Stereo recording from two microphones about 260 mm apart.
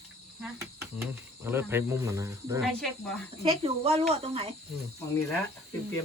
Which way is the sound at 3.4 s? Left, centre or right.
Right.